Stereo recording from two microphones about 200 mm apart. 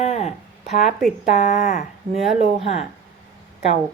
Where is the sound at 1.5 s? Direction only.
40° left (ahead or behind).